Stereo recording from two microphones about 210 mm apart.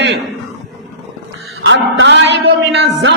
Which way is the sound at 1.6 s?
65° right (ahead or behind).